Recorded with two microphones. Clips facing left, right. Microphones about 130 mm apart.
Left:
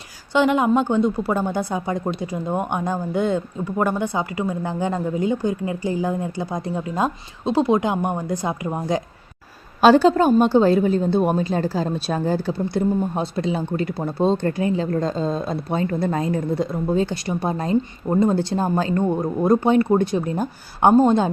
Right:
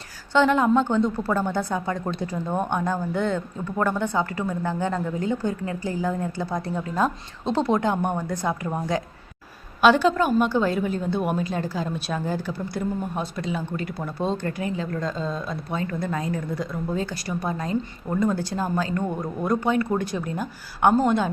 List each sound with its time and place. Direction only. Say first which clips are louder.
0.3 s a woman's voice: left 1 dB; 15° left (ahead or behind)
9.8 s a woman's voice: left 5 dB; 35° left (ahead or behind)